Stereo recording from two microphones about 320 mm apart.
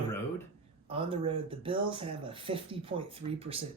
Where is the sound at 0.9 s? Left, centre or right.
Centre.